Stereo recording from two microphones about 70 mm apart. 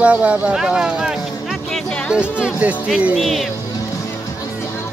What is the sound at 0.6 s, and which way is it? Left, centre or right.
Speech, centre.